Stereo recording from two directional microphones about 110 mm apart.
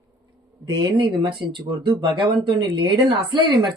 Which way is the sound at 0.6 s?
40° right (ahead or behind).